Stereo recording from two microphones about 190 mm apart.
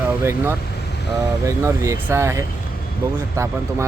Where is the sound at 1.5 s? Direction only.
15° right (ahead or behind).